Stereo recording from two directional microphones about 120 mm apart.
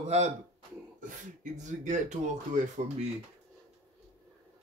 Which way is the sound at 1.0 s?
90° right.